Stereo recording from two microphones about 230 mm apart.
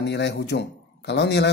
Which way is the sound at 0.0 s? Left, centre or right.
Left.